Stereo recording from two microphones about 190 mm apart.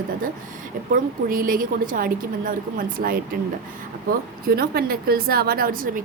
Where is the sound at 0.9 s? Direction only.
45° right (ahead or behind).